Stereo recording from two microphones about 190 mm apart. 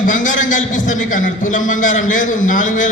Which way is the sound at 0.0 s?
45° left (ahead or behind).